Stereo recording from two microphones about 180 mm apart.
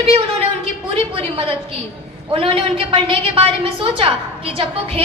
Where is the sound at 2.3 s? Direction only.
30° right (ahead or behind).